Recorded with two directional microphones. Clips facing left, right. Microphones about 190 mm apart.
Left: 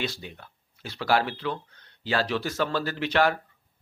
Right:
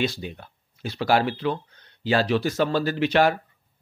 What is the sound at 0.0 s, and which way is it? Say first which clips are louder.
Speech: right 6 dB; 15° right (ahead or behind).